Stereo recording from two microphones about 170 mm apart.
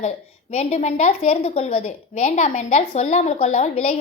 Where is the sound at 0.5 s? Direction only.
40° left (ahead or behind).